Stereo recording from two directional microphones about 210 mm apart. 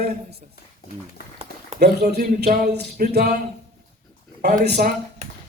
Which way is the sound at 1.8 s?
50° right (ahead or behind).